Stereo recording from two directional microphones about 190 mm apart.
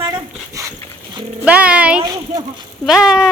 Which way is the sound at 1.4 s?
5° right (ahead or behind).